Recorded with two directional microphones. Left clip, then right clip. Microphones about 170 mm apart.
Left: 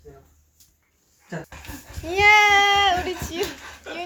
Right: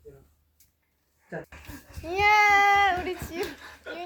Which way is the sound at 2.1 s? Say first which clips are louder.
Left 5 dB; centre (ahead or behind).